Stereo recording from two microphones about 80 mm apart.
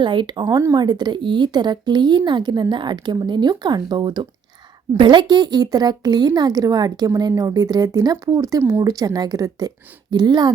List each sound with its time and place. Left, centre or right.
0.0 s speech: right
0.4 s speech: right